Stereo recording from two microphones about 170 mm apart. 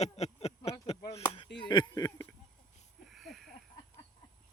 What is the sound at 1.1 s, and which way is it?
Chop, 35° left (ahead or behind).